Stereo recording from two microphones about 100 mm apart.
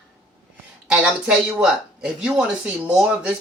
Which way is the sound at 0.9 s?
10° right (ahead or behind).